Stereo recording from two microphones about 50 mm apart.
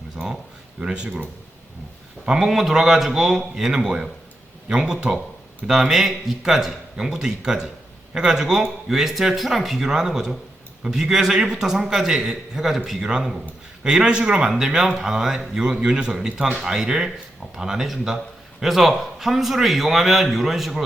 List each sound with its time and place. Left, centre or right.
0.2 s a man's voice: centre
0.8 s speech: centre
2.2 s a man's voice: centre